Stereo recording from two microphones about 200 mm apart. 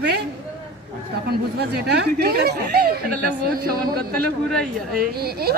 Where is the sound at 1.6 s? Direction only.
55° right (ahead or behind).